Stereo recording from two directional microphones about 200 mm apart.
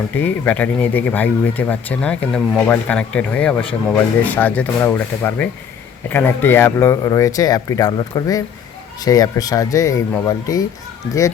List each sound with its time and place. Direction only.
0.2 s speech: 10° left (ahead or behind)